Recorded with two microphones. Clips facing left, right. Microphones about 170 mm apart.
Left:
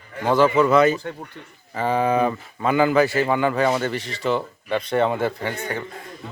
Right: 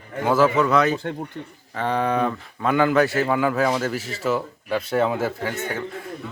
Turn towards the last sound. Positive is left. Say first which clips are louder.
# left 1 dB
turn(degrees=-5)  # may be behind; listen again after turning